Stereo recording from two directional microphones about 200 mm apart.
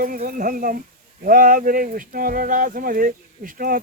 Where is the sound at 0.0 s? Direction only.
45° right (ahead or behind).